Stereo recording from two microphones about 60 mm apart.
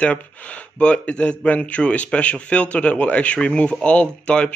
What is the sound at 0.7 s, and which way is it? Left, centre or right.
Speech, left.